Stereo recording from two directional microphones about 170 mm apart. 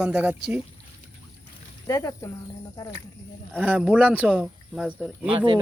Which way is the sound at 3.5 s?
10° right (ahead or behind).